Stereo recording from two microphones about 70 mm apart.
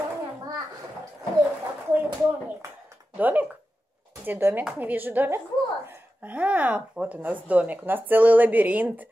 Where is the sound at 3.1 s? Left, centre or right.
Right.